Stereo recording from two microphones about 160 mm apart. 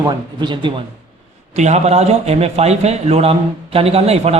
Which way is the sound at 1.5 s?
45° right (ahead or behind).